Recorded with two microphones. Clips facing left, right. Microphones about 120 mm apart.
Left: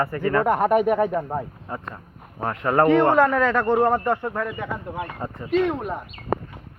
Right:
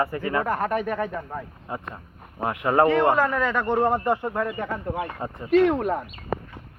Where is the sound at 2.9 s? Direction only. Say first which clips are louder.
Left 3 dB; 5° right (ahead or behind).